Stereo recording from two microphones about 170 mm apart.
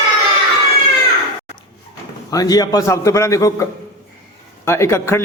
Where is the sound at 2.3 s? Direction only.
20° left (ahead or behind).